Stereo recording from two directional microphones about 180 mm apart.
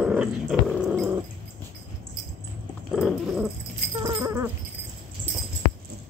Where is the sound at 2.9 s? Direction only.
5° right (ahead or behind).